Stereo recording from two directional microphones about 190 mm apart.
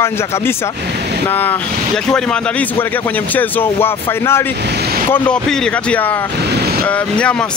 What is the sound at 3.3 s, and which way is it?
Speech, 10° left (ahead or behind).